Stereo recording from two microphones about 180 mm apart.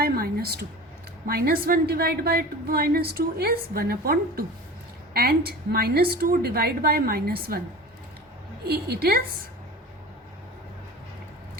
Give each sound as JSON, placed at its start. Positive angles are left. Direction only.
{"t": 0.0, "sound": "a sound", "side_deg": -60}
{"t": 1.3, "sound": "a woman's voice", "side_deg": -55}
{"t": 8.6, "sound": "a woman's voice", "side_deg": -60}